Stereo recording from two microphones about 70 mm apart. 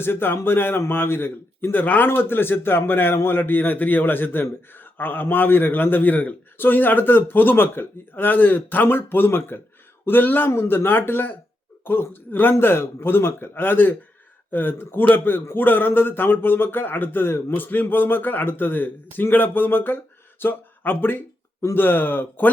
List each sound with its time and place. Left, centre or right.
0.0 s a man's voice: left